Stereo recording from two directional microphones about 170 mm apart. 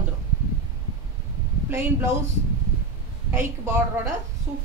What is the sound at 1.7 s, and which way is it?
Speech, 15° right (ahead or behind).